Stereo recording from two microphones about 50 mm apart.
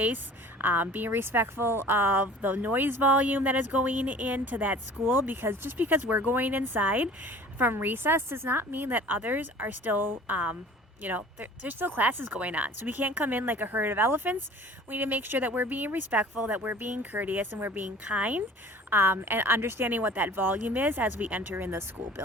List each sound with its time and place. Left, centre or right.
0.6 s speech: right
1.2 s a woman's voice: right
18.0 s speech: right
18.9 s a woman's voice: right